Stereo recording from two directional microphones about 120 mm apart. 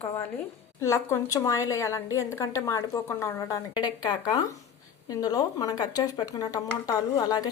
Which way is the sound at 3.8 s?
35° left (ahead or behind).